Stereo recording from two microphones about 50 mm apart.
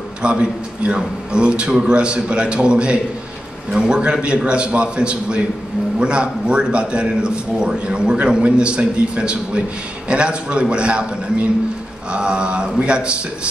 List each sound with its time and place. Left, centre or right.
0.2 s a man's voice: right